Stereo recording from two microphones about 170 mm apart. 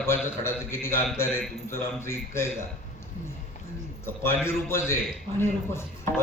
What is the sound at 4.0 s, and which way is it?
A man's voice, 15° left (ahead or behind).